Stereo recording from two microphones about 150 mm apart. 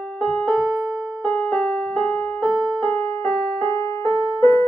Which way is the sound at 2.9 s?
10° left (ahead or behind).